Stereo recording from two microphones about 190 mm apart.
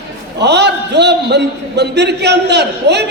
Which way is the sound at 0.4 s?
65° right (ahead or behind).